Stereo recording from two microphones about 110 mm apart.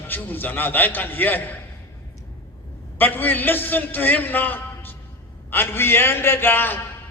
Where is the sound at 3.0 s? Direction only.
15° left (ahead or behind).